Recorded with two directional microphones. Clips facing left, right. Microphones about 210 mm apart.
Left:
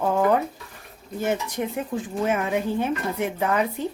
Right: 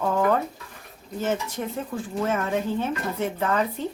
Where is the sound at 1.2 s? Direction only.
15° left (ahead or behind).